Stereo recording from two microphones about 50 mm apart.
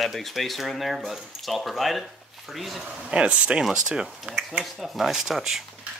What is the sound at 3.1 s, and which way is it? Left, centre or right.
Speech, right.